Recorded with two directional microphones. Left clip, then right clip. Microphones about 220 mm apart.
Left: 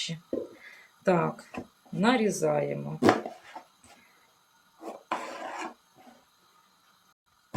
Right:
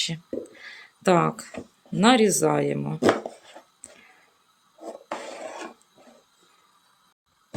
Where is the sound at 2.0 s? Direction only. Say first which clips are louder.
Right 7 dB; 50° right (ahead or behind).